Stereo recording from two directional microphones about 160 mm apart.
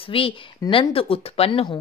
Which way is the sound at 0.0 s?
35° left (ahead or behind).